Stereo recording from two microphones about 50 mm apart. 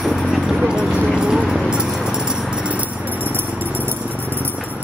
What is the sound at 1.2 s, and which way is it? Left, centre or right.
Clip-clop, centre.